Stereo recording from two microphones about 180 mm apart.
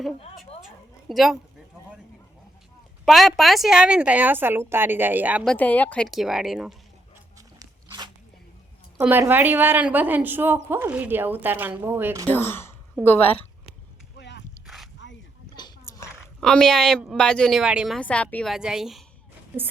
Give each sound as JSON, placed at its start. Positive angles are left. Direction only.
{"t": 1.0, "sound": "a woman's voice", "side_deg": 0}
{"t": 3.1, "sound": "a woman's voice", "side_deg": 0}
{"t": 5.5, "sound": "a woman's voice", "side_deg": 10}
{"t": 7.3, "sound": "biting", "side_deg": -20}
{"t": 9.0, "sound": "a woman's voice", "side_deg": -10}
{"t": 12.3, "sound": "speech", "side_deg": 10}
{"t": 14.2, "sound": "a sound", "side_deg": 70}
{"t": 15.0, "sound": "a sound", "side_deg": 90}
{"t": 15.4, "sound": "a sound", "side_deg": 25}
{"t": 16.4, "sound": "a woman's voice", "side_deg": 5}